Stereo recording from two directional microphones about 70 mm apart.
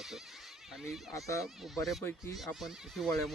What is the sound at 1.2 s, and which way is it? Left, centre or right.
Speech, left.